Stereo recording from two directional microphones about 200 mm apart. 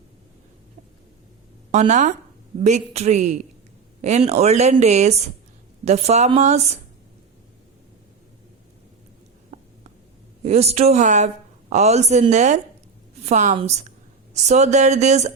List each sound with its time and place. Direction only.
1.7 s speech: 35° right (ahead or behind)
10.4 s speech: 30° right (ahead or behind)